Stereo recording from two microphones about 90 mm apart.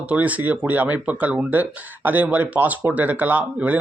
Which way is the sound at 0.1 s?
15° right (ahead or behind).